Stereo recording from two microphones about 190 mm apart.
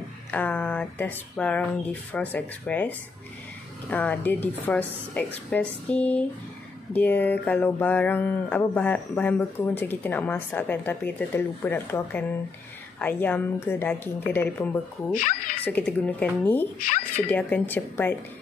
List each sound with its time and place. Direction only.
0.3 s speech: 10° left (ahead or behind)
3.9 s speech: 10° left (ahead or behind)